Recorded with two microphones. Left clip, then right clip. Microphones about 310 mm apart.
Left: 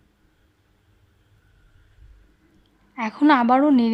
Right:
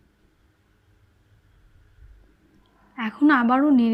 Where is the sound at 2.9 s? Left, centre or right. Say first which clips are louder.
Left 2 dB; left.